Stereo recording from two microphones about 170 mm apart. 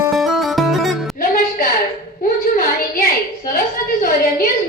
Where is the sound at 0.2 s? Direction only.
Centre (ahead or behind).